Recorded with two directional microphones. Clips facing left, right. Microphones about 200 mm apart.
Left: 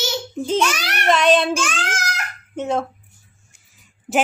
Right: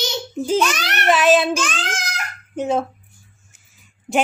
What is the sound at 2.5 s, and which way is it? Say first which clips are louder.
Child singing: right 2 dB; 5° right (ahead or behind).